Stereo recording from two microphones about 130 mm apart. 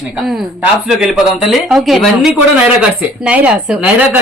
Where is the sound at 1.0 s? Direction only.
Centre (ahead or behind).